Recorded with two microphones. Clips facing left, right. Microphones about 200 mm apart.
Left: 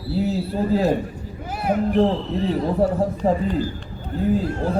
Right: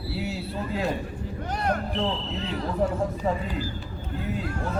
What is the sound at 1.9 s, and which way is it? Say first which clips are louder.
Speech: left 9 dB; 55° left (ahead or behind).